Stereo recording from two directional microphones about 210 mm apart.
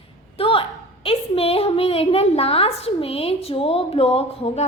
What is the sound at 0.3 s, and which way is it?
A woman's voice, 25° left (ahead or behind).